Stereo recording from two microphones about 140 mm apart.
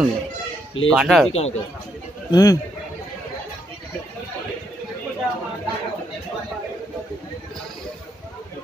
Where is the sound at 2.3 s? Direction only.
25° left (ahead or behind).